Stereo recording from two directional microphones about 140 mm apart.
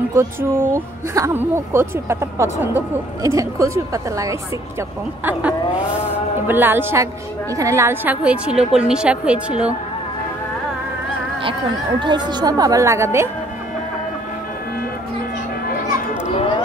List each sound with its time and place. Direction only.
0.1 s a woman's voice: 20° right (ahead or behind)
6.4 s a woman's voice: 15° right (ahead or behind)
12.0 s a woman's voice: 30° right (ahead or behind)